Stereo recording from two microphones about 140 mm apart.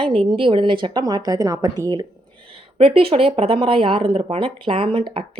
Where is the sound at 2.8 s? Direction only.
40° right (ahead or behind).